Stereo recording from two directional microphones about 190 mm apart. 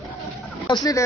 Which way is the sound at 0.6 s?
20° left (ahead or behind).